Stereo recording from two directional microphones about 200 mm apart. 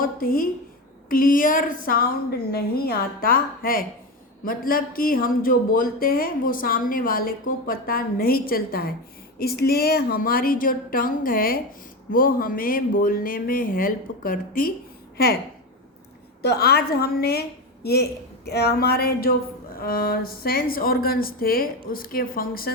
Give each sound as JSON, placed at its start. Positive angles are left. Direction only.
{"t": 0.0, "sound": "speech", "side_deg": 45}
{"t": 16.4, "sound": "speech", "side_deg": 55}